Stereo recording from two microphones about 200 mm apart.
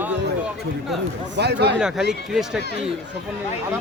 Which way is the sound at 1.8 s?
5° right (ahead or behind).